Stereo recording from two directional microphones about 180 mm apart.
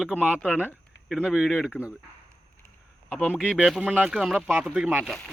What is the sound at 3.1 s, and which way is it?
Speech, 5° left (ahead or behind).